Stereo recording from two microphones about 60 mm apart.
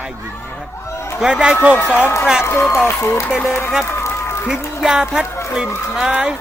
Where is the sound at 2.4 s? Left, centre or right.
Left.